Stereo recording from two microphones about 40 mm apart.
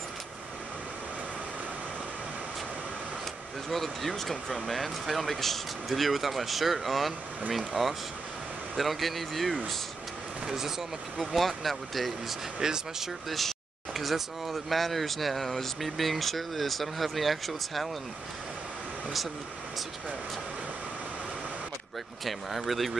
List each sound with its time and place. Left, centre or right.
3.7 s speech: centre
12.5 s speech: centre
13.3 s speech: centre
22.2 s speech: centre